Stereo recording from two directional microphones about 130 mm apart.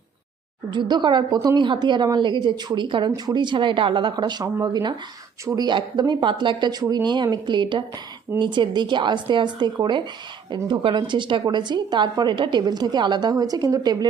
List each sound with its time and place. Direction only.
0.7 s a woman's voice: 35° right (ahead or behind)